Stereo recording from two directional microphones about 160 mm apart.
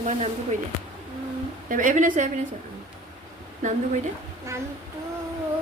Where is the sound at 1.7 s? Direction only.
55° right (ahead or behind).